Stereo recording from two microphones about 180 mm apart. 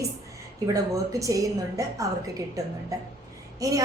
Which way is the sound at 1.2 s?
20° right (ahead or behind).